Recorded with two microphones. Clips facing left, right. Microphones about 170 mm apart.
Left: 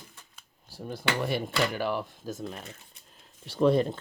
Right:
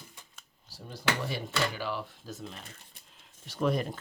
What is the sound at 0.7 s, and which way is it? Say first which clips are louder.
Speech: left 2 dB; 60° left (ahead or behind).